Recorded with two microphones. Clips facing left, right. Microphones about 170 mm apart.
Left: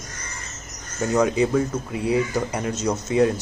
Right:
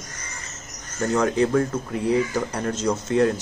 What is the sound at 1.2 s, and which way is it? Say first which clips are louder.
Speech: even; 10° left (ahead or behind).